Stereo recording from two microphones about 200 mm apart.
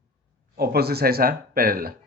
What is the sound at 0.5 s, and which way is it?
Speech, 50° right (ahead or behind).